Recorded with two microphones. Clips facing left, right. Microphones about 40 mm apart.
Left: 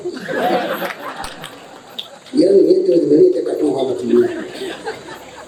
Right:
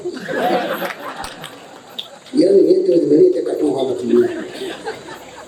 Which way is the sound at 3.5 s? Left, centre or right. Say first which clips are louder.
Left 1 dB; centre.